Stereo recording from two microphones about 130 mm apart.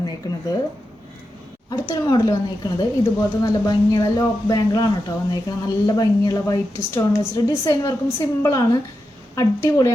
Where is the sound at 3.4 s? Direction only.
30° left (ahead or behind).